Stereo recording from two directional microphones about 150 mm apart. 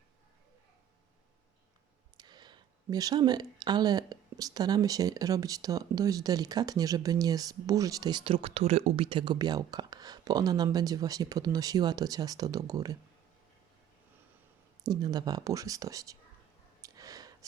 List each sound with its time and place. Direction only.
2.1 s speech: 30° right (ahead or behind)
14.8 s speech: 25° right (ahead or behind)
16.8 s a sound: 25° right (ahead or behind)